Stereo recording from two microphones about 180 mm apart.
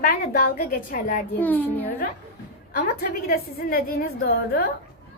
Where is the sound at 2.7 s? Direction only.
55° left (ahead or behind).